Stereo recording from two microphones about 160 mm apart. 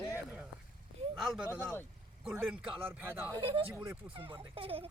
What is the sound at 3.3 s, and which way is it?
Speech, 30° right (ahead or behind).